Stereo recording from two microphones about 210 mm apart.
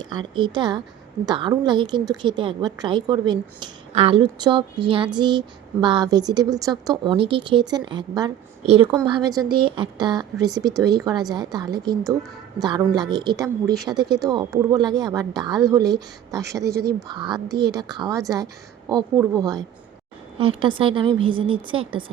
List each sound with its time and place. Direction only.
0.0 s a woman's voice: 20° right (ahead or behind)